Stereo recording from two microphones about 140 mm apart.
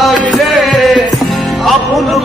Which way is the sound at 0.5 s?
Centre (ahead or behind).